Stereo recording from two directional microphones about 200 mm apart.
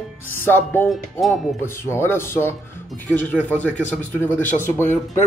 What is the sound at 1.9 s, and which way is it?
Speech, 10° left (ahead or behind).